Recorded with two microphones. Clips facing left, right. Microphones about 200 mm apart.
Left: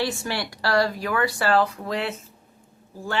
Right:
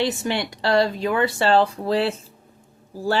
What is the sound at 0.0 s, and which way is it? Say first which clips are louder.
A woman's voice: right 4 dB; 20° right (ahead or behind).